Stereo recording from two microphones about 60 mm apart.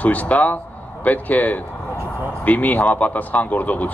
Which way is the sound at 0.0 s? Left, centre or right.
Left.